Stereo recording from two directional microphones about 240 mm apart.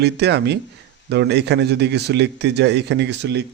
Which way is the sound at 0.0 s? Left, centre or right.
Right.